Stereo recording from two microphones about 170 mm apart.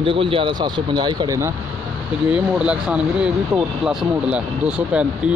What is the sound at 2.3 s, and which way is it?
Speech, 5° right (ahead or behind).